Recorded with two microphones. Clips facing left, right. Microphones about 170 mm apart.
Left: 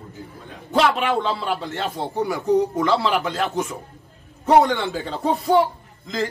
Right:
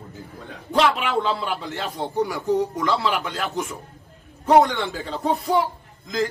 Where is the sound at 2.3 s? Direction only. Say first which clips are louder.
Left 7 dB; 35° left (ahead or behind).